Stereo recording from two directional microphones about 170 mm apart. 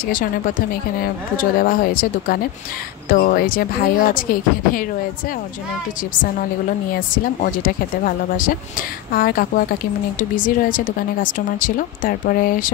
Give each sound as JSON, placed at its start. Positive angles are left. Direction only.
{"t": 0.1, "sound": "a woman's voice", "side_deg": 55}
{"t": 7.4, "sound": "a woman's voice", "side_deg": 55}